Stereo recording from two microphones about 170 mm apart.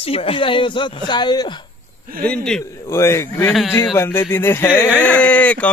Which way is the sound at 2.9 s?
15° left (ahead or behind).